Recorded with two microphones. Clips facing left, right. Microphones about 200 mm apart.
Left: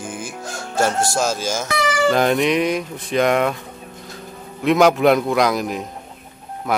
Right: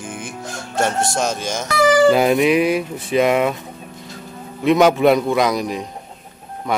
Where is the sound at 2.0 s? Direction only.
5° right (ahead or behind).